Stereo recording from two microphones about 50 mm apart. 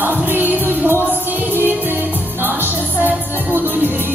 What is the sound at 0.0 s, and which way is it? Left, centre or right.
Music, right.